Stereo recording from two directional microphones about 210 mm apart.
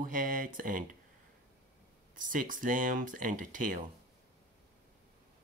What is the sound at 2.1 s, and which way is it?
Speech, 40° right (ahead or behind).